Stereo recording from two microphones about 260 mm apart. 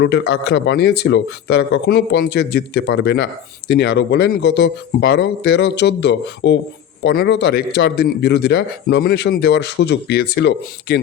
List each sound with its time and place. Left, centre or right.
0.0 s speech: left